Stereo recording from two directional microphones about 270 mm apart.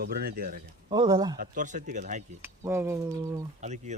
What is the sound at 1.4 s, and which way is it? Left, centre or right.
Speech, right.